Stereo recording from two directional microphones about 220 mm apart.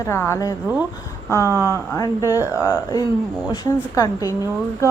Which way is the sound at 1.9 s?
15° left (ahead or behind).